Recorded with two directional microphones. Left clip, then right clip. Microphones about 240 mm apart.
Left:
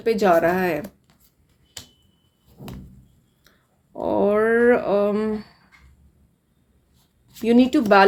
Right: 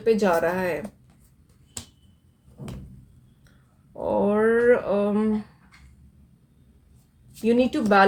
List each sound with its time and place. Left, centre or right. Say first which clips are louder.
0.0 s speech: left 3 dB; left
4.0 s speech: left 2 dB; left
7.4 s speech: left 4 dB; left